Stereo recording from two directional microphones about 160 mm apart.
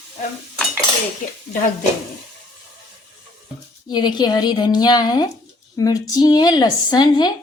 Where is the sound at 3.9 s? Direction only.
25° left (ahead or behind).